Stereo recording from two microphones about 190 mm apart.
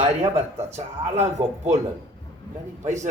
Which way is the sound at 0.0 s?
35° right (ahead or behind).